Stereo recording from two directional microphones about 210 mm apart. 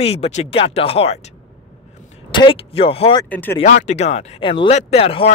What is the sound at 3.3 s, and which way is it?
Speech, 10° left (ahead or behind).